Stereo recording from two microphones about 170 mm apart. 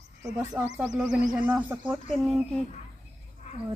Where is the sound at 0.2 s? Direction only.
20° right (ahead or behind).